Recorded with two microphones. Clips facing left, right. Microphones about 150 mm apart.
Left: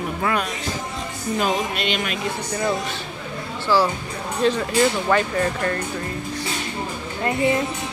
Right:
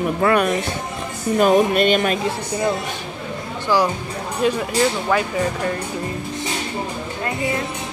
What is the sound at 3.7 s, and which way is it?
Speech, 15° right (ahead or behind).